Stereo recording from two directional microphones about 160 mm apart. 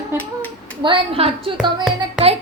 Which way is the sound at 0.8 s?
35° right (ahead or behind).